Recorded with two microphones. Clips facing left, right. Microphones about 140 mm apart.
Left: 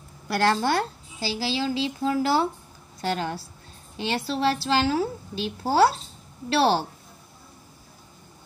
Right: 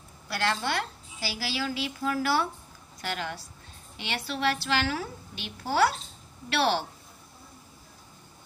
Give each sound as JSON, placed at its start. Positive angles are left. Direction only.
{"t": 0.3, "sound": "a woman's voice", "side_deg": 40}
{"t": 1.2, "sound": "a woman's voice", "side_deg": 25}